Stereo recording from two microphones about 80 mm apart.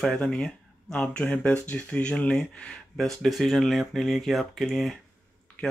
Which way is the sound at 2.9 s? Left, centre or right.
Centre.